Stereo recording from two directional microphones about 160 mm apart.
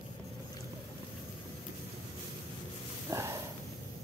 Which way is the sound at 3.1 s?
20° right (ahead or behind).